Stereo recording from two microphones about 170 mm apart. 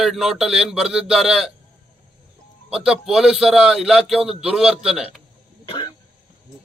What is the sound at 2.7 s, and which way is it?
A man's voice, 5° right (ahead or behind).